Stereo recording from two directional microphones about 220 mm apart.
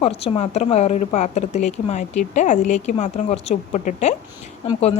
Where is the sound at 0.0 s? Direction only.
25° left (ahead or behind).